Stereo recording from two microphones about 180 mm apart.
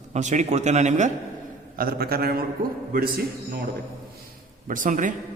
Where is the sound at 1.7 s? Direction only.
55° right (ahead or behind).